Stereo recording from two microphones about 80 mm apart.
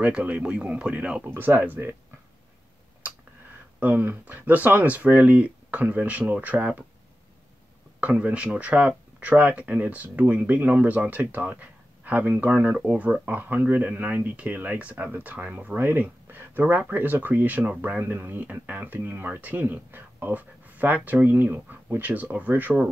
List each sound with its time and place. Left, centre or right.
0.0 s speech: centre
1.3 s speech: right
3.8 s speech: right
8.0 s speech: centre